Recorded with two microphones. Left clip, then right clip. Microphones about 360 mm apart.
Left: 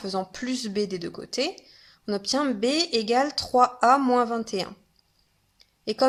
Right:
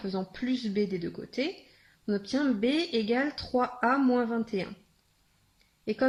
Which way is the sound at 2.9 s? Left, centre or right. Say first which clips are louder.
Left 6 dB; left.